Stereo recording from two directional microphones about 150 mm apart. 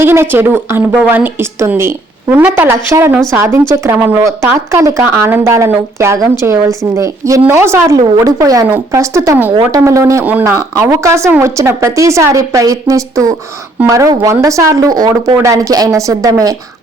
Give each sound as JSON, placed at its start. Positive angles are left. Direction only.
{"t": 0.0, "sound": "a woman's voice", "side_deg": -15}